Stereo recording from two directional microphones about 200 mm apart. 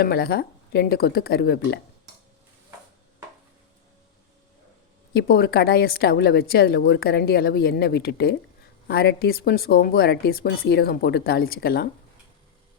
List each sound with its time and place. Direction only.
0.0 s a woman's voice: 50° left (ahead or behind)
5.1 s a woman's voice: 50° left (ahead or behind)